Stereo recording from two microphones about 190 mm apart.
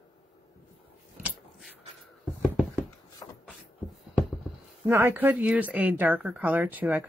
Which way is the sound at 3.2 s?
20° left (ahead or behind).